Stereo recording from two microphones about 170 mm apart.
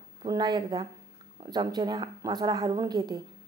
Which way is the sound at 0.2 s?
25° right (ahead or behind).